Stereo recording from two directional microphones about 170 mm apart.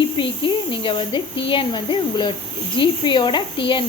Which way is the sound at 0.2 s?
30° left (ahead or behind).